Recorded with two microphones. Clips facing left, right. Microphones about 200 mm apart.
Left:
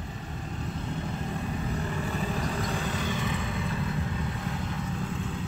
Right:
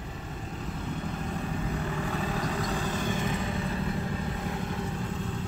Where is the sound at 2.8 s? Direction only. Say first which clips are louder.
Right 1 dB; 45° right (ahead or behind).